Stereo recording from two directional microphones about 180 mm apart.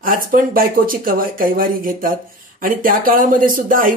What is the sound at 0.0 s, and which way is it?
Speech, 50° right (ahead or behind).